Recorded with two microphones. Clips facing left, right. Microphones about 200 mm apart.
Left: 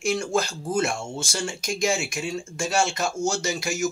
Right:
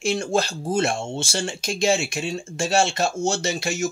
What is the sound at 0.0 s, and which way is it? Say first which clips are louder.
Speech: right 2 dB; 25° right (ahead or behind).